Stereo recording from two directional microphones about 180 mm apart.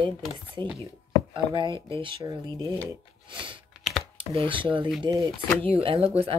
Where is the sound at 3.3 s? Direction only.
30° right (ahead or behind).